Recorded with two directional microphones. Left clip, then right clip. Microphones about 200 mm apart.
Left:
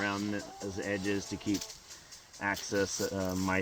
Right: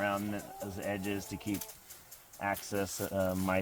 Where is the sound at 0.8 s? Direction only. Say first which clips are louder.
Left 3 dB; 45° right (ahead or behind).